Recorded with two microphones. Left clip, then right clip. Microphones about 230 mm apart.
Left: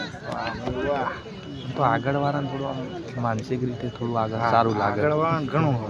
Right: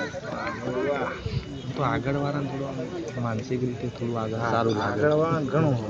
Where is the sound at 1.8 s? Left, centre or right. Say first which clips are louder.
Left 5 dB; centre.